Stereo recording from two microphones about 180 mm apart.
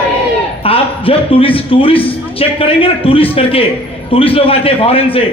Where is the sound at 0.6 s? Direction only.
30° left (ahead or behind).